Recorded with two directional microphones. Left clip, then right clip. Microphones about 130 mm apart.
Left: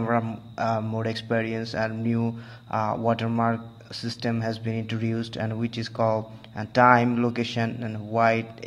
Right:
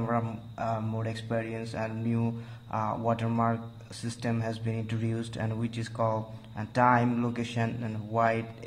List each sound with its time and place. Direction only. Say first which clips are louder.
0.0 s speech: left 5 dB; 35° left (ahead or behind)